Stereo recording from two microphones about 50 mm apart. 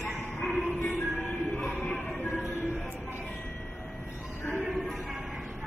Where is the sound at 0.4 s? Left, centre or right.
Left.